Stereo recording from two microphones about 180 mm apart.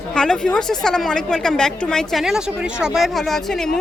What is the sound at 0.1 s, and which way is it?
A woman's voice, 5° left (ahead or behind).